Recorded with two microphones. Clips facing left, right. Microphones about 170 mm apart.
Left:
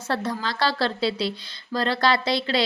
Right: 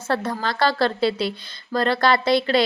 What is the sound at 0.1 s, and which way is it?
Speech, 50° right (ahead or behind).